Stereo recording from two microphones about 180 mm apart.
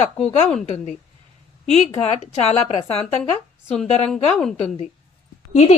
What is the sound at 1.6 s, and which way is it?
A woman's voice, 35° left (ahead or behind).